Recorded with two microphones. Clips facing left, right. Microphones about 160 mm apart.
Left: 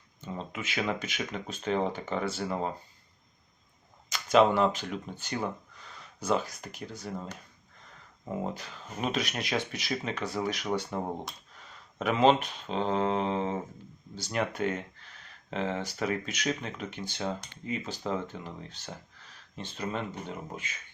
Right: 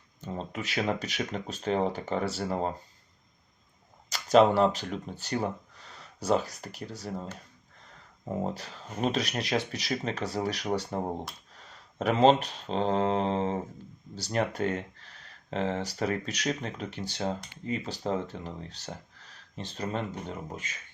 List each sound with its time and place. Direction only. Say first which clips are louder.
0.2 s speech: right 2 dB; 40° right (ahead or behind)
4.1 s speech: right 2 dB; 40° right (ahead or behind)
8.5 s speech: right 3 dB; 35° right (ahead or behind)